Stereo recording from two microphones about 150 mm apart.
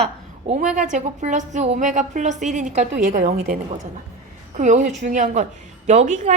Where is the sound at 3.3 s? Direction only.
80° right.